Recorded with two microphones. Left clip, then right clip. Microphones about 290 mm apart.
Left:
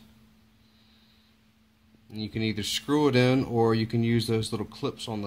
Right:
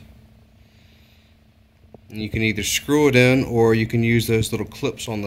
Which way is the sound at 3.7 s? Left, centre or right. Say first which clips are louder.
Right 7 dB; centre.